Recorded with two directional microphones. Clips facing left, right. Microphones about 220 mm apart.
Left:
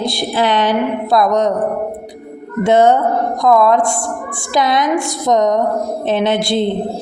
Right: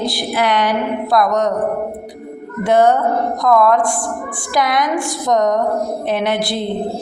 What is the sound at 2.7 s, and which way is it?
A woman's voice, 25° left (ahead or behind).